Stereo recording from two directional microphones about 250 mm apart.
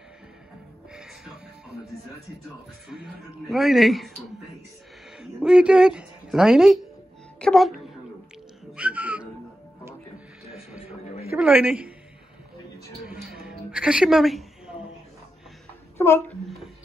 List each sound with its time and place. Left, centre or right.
0.9 s music: centre
2.9 s speech: centre
5.2 s speech: centre
7.3 s music: centre
8.7 s whistling: centre
10.5 s music: centre
11.3 s speech: centre
13.1 s music: centre
16.0 s a child's voice: centre